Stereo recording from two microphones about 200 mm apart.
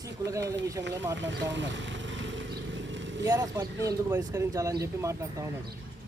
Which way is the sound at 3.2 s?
15° right (ahead or behind).